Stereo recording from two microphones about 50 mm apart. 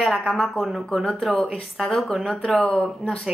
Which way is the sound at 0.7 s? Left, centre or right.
Centre.